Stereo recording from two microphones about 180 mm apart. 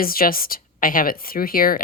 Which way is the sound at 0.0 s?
55° left (ahead or behind).